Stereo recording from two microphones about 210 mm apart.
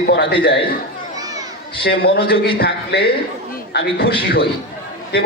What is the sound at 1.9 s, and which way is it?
A man's voice, 50° left (ahead or behind).